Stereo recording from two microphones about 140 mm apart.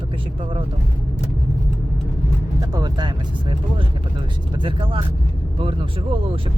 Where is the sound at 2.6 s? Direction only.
30° right (ahead or behind).